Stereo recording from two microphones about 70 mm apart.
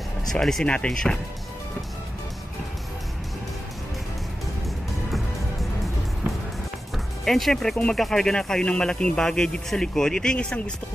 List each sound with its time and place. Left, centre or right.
0.3 s a man's voice: centre
7.2 s speech: centre
7.7 s a man's voice: centre